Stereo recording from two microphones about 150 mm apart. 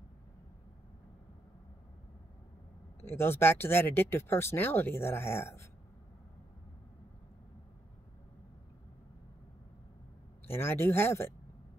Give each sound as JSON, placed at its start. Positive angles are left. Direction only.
{"t": 3.0, "sound": "speech", "side_deg": 15}
{"t": 10.4, "sound": "speech", "side_deg": 15}